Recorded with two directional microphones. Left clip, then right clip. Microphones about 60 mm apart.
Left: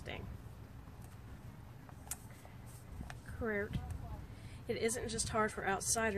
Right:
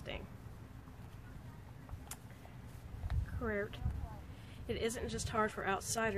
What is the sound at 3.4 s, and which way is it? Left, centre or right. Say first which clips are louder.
Speech: left 1 dB; centre.